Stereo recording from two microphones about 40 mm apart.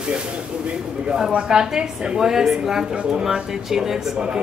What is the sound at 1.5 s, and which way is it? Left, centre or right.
Speech, centre.